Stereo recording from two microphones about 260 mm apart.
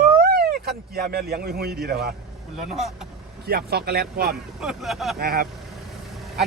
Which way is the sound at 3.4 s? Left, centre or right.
Right.